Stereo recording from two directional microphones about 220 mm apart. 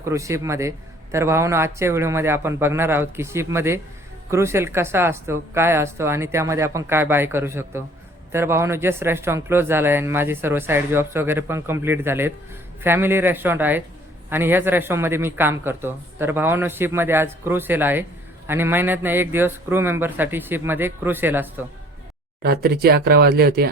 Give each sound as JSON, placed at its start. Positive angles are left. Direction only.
{"t": 0.0, "sound": "speech", "side_deg": -15}
{"t": 22.4, "sound": "speech", "side_deg": -45}